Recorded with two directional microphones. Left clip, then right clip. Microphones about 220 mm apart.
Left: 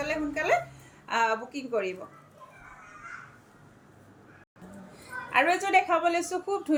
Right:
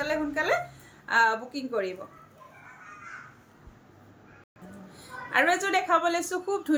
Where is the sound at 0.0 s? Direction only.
15° right (ahead or behind).